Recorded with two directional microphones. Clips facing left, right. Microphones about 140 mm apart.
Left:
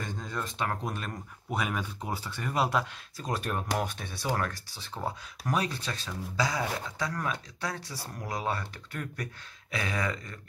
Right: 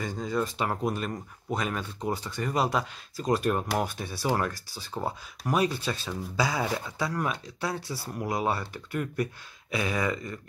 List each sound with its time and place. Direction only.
0.0 s speech: 10° right (ahead or behind)
1.5 s speech: 10° left (ahead or behind); by 10.3 s 10° right (ahead or behind)